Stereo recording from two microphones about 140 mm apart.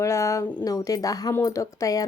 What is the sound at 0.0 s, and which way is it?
Speech, 20° left (ahead or behind).